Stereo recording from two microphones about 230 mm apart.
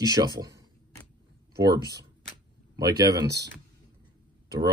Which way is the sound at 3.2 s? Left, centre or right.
Right.